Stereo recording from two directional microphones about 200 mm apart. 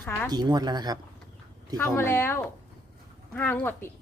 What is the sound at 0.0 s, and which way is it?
Speech, 10° left (ahead or behind).